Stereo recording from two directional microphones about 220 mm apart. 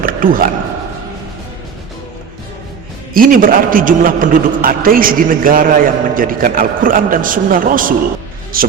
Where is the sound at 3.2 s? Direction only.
40° right (ahead or behind).